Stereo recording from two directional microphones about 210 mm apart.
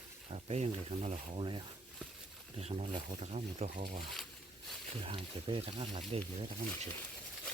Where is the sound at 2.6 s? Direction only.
30° right (ahead or behind).